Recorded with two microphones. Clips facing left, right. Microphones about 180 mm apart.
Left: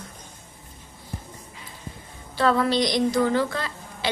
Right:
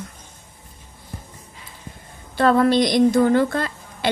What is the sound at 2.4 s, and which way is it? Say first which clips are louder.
A woman's voice: right 5 dB; 50° right (ahead or behind).